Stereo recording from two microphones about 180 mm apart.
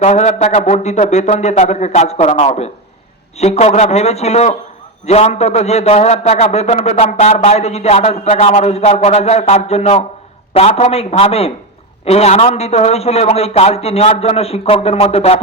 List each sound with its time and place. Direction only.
0.0 s a man's voice: 40° left (ahead or behind)